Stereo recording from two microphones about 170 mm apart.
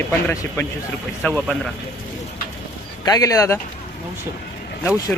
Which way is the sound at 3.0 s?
20° left (ahead or behind).